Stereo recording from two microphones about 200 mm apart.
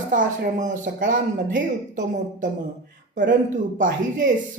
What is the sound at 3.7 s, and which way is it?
Speech, 40° right (ahead or behind).